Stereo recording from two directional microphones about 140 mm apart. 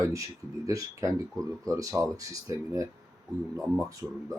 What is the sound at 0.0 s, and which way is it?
Speech, 25° right (ahead or behind).